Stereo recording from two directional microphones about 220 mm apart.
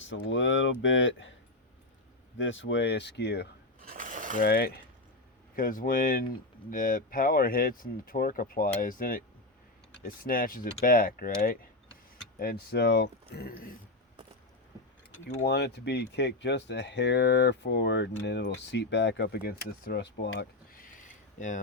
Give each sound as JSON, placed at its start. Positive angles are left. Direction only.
{"t": 0.3, "sound": "speech", "side_deg": 60}
{"t": 2.4, "sound": "speech", "side_deg": 60}
{"t": 3.8, "sound": "a sound", "side_deg": -40}
{"t": 4.4, "sound": "speech", "side_deg": 45}
{"t": 15.4, "sound": "speech", "side_deg": 50}